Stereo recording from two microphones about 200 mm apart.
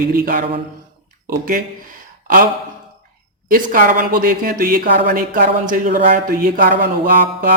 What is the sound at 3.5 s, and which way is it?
Speech, 45° right (ahead or behind).